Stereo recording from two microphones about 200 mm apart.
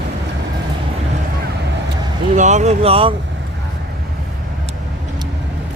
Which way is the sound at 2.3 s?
35° right (ahead or behind).